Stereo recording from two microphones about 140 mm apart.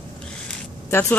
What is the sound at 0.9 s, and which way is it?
Speech, 15° left (ahead or behind).